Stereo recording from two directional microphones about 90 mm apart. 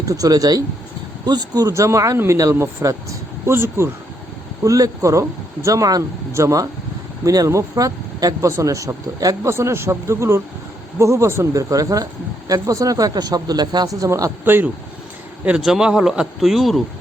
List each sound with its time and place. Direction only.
0.0 s speech: 40° right (ahead or behind)
14.4 s speech: 20° right (ahead or behind)
15.4 s speech: 10° right (ahead or behind)